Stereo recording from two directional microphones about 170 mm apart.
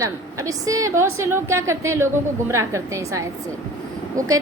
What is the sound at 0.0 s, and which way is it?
A woman's voice, 20° right (ahead or behind).